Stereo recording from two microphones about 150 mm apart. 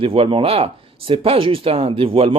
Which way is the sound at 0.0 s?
40° right (ahead or behind).